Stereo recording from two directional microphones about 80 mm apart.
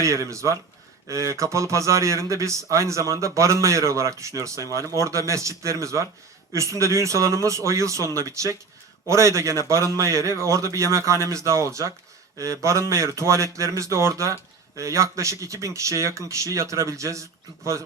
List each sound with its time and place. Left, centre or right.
0.0 s speech: right